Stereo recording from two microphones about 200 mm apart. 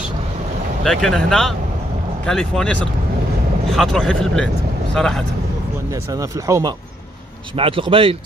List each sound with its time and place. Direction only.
0.8 s speech: 5° left (ahead or behind)
6.4 s speech: 15° right (ahead or behind)
7.5 s speech: 25° right (ahead or behind)